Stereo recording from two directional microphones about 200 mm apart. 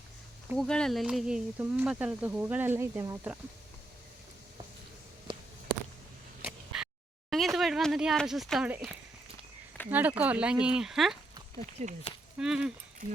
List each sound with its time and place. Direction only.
0.5 s speech: 5° left (ahead or behind)
5.3 s a sound: 20° right (ahead or behind)
6.7 s a sound: 5° right (ahead or behind)
7.3 s speech: centre (ahead or behind)
9.9 s speech: 10° right (ahead or behind)
11.8 s speech: 35° right (ahead or behind)
12.4 s speech: 5° right (ahead or behind)